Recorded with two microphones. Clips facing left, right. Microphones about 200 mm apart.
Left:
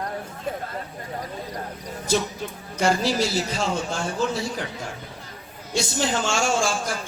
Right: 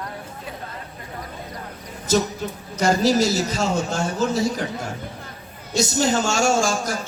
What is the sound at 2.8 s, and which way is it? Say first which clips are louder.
A man's voice: right 4 dB; 40° right (ahead or behind).